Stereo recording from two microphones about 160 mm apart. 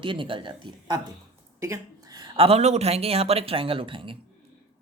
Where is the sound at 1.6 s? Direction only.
20° right (ahead or behind).